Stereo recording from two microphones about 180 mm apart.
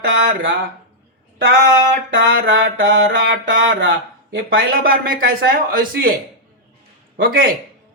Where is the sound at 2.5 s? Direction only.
90° right.